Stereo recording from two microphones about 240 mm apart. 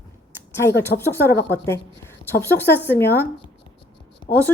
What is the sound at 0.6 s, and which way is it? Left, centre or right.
Speech, centre.